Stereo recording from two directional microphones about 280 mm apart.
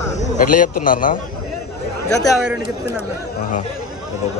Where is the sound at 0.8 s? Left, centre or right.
Left.